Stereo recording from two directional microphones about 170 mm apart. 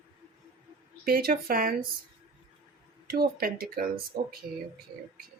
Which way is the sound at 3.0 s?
65° right (ahead or behind).